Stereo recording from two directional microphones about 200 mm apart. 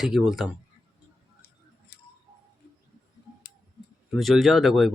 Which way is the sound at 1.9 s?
55° left (ahead or behind).